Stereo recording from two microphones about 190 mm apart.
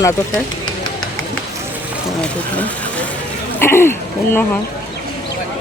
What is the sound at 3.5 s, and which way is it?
Speech, 10° left (ahead or behind).